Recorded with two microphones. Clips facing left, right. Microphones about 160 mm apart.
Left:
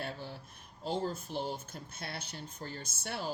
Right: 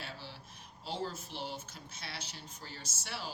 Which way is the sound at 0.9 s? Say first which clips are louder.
Left 5 dB; 45° left (ahead or behind).